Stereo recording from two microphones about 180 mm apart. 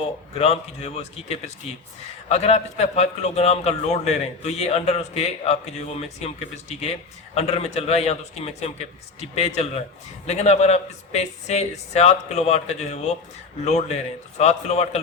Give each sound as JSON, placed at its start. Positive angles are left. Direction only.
{"t": 0.3, "sound": "a man's voice", "side_deg": 35}